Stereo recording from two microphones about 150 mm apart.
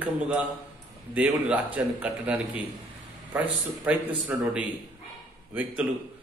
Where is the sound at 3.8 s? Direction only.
10° right (ahead or behind).